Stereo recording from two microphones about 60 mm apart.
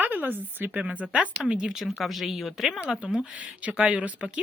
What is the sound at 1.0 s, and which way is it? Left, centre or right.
Speech, centre.